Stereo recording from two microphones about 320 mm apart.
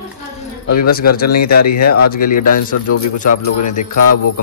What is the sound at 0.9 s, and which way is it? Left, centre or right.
Speech, left.